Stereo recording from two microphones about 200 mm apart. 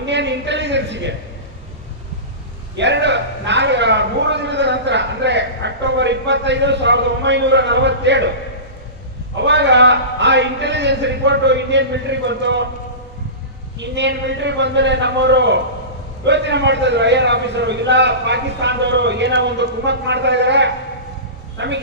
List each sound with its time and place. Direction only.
0.0 s a sound: 60° right (ahead or behind)
2.7 s a man's voice: 60° right (ahead or behind)
9.4 s a man's voice: 60° right (ahead or behind)
13.7 s a man's voice: 60° right (ahead or behind)